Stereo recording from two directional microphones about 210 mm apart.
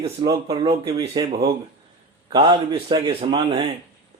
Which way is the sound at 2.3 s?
25° right (ahead or behind).